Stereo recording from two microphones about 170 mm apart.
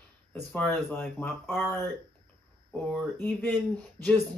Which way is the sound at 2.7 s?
5° left (ahead or behind).